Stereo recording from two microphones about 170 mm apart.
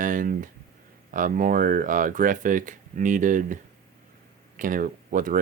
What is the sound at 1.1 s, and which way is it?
Speech, 55° right (ahead or behind).